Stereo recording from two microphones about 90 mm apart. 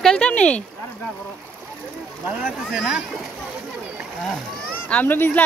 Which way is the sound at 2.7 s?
5° right (ahead or behind).